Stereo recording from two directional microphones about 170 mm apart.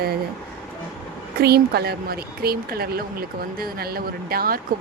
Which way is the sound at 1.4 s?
70° right (ahead or behind).